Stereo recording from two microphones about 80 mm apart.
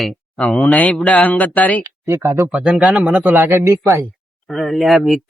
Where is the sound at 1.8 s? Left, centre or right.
Right.